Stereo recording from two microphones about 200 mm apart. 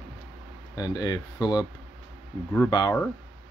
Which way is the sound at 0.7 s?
20° left (ahead or behind).